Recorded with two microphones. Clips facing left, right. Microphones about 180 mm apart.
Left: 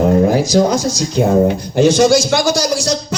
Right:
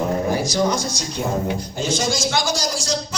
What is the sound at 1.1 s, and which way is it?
A man's voice, 65° left (ahead or behind).